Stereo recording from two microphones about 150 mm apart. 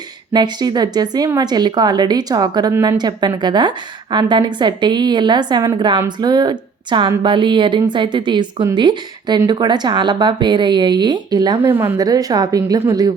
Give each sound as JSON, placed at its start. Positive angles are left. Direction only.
{"t": 0.3, "sound": "a woman's voice", "side_deg": -30}